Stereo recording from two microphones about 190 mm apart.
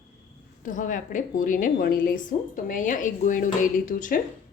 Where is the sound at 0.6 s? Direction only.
45° left (ahead or behind).